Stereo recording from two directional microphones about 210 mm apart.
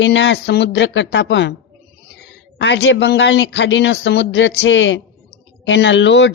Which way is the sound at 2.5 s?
55° left (ahead or behind).